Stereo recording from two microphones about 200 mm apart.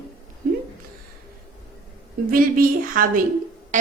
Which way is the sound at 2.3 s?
45° right (ahead or behind).